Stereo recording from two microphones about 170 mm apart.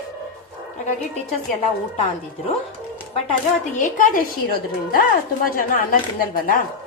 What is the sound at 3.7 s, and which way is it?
A woman's voice, 50° left (ahead or behind).